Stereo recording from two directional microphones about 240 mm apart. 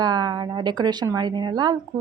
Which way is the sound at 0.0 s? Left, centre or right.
Centre.